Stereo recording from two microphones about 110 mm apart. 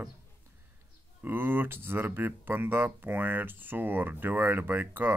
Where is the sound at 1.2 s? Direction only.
20° right (ahead or behind).